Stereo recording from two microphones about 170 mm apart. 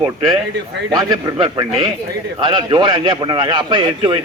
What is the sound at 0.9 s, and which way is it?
A man's voice, 25° right (ahead or behind).